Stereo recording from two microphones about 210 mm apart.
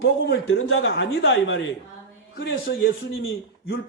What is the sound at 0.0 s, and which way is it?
A man's voice, 65° left (ahead or behind).